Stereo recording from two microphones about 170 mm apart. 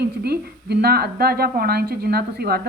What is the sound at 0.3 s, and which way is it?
Speech, 70° right (ahead or behind).